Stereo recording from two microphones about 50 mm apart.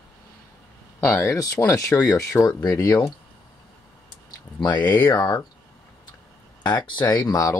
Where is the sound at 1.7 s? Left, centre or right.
Left.